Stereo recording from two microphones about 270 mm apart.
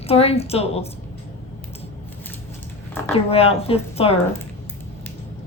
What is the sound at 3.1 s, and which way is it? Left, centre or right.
Speech, left.